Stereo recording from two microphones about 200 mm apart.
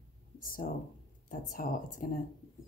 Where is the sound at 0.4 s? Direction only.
45° left (ahead or behind).